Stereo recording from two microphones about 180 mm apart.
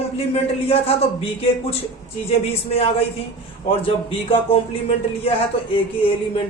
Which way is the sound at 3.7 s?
30° left (ahead or behind).